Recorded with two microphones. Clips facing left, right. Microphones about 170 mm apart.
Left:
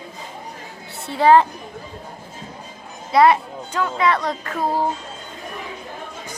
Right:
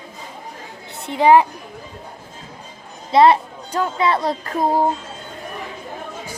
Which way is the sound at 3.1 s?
25° right (ahead or behind).